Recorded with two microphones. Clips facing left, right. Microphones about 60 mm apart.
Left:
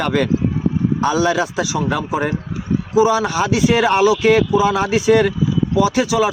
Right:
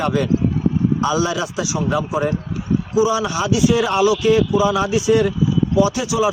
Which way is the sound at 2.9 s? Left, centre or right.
Left.